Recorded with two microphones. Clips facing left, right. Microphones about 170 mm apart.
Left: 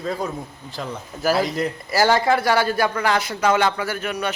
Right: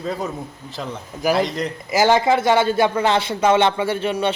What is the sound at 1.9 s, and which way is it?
Speech, 20° right (ahead or behind).